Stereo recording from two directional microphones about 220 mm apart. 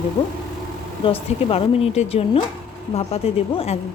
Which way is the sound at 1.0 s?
25° left (ahead or behind).